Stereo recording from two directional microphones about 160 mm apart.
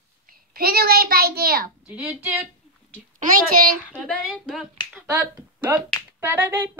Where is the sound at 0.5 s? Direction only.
70° right (ahead or behind).